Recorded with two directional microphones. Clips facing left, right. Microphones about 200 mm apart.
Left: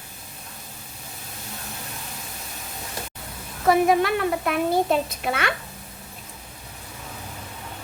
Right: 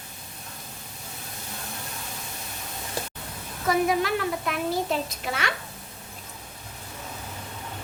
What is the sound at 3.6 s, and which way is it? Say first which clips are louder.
Speech: left 5 dB; 55° left (ahead or behind).